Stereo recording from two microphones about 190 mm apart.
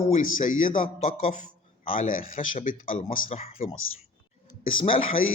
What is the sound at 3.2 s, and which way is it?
Speech, 30° left (ahead or behind).